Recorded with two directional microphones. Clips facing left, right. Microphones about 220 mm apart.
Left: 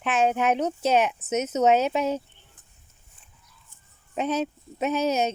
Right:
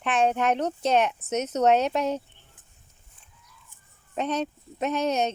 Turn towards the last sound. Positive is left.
turn(degrees=5)  # may be behind; listen again after turning